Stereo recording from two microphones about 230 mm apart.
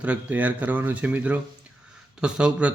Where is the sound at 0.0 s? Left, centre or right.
Centre.